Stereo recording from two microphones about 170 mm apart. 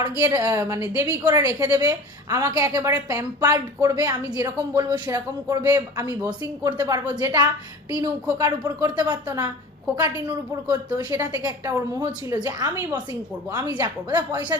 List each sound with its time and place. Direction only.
0.0 s speech: 20° right (ahead or behind)